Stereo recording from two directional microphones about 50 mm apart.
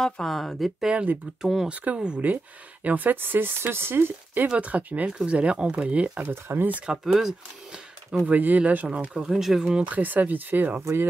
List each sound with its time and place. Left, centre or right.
0.0 s speech: centre
0.9 s speech: right
1.4 s speech: centre
2.0 s speech: centre
2.8 s speech: right
4.5 s speech: right
6.2 s speech: right
6.9 s speech: centre
8.3 s speech: right
8.8 s speech: right
9.2 s speech: centre
9.7 s speech: right
9.9 s speech: right